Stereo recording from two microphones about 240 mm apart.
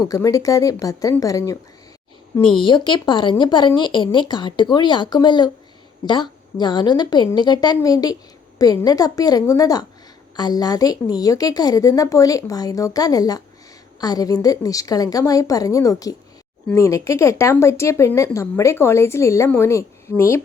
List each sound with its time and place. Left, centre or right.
0.1 s speech: centre
2.6 s speech: centre